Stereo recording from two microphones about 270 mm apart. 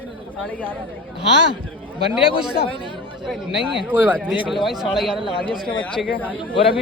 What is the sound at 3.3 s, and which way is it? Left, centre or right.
Speech, centre.